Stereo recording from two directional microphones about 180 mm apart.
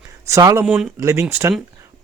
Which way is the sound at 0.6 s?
Centre (ahead or behind).